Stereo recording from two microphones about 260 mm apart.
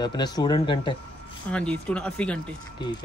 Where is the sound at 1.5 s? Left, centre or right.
Centre.